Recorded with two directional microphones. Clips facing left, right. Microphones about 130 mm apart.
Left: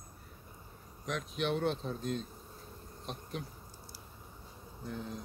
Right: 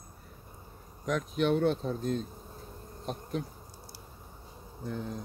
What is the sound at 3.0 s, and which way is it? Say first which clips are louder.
Bee: right 7 dB; 40° right (ahead or behind).